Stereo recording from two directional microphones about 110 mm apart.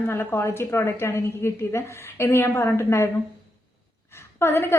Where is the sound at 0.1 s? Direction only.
20° left (ahead or behind).